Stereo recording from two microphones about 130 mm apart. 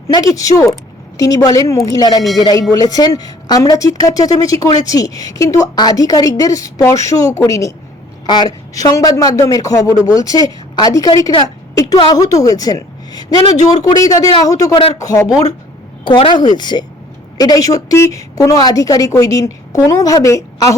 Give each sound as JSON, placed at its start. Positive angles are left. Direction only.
{"t": 0.1, "sound": "a woman's voice", "side_deg": 25}
{"t": 16.0, "sound": "a woman's voice", "side_deg": 40}